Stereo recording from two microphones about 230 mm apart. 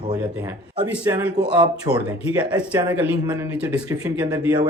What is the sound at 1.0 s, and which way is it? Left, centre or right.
Speech, centre.